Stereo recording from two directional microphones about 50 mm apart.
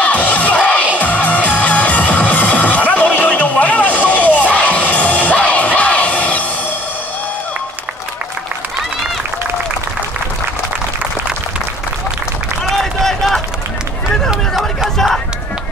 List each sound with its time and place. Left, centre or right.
0.0 s crowd: left
0.9 s music: left
12.6 s a sound: centre